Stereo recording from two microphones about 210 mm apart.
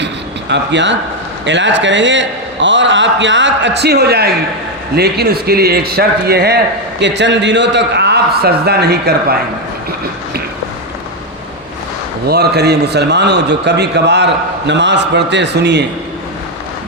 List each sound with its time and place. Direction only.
0.5 s a man's voice: 55° right (ahead or behind)
12.3 s a man's voice: 50° right (ahead or behind)